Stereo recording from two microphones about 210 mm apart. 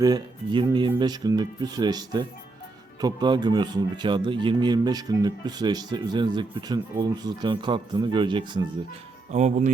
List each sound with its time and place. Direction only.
0.0 s speech: 20° right (ahead or behind)
9.3 s speech: 35° right (ahead or behind)